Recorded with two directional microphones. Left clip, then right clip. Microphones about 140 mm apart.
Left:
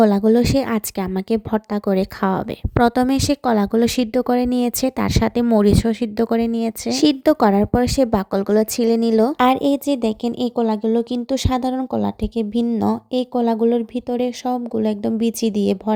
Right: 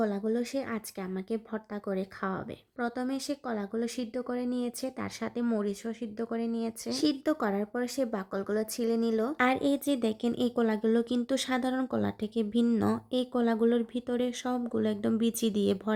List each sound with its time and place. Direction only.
0.0 s a woman's voice: 70° left (ahead or behind); by 10.5 s 40° left (ahead or behind)
10.5 s speech: 30° left (ahead or behind)